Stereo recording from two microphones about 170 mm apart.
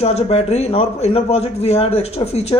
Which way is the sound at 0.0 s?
40° left (ahead or behind).